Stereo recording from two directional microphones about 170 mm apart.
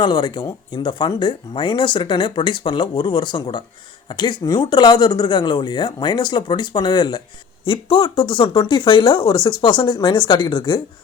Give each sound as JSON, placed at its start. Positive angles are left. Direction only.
{"t": 0.0, "sound": "speech", "side_deg": 25}